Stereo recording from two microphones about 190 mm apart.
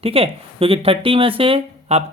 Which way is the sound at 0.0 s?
30° right (ahead or behind).